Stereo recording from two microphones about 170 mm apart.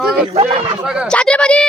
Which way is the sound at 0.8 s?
5° right (ahead or behind).